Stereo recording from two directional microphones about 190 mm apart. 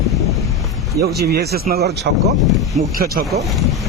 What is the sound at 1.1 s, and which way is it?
Speech, 55° right (ahead or behind).